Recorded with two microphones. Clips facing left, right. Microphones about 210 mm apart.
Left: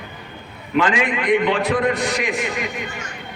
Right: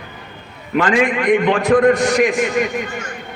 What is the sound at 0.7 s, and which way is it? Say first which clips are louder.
A man's voice: right 3 dB; 50° right (ahead or behind).